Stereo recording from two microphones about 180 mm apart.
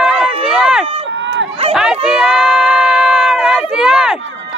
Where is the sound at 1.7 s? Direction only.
5° right (ahead or behind).